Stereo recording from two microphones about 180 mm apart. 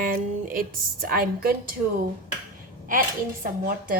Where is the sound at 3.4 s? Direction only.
50° right (ahead or behind).